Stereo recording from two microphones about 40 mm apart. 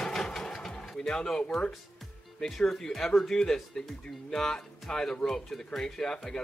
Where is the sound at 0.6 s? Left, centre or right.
Centre.